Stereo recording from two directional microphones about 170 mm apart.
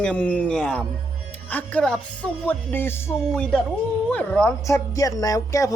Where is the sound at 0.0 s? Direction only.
5° left (ahead or behind).